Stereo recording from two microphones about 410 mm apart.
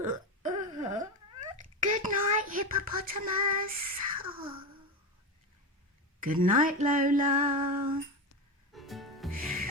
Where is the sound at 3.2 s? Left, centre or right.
Right.